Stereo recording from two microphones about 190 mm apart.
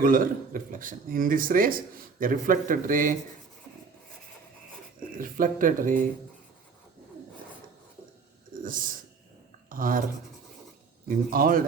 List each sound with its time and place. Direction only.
0.0 s speech: 45° right (ahead or behind)
5.1 s speech: 45° right (ahead or behind)
8.6 s speech: 45° right (ahead or behind)
11.3 s speech: 50° right (ahead or behind)